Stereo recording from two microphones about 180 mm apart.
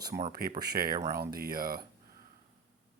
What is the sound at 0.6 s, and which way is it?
Speech, 60° right (ahead or behind).